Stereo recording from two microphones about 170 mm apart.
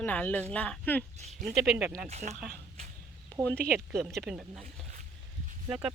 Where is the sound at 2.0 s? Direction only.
40° right (ahead or behind).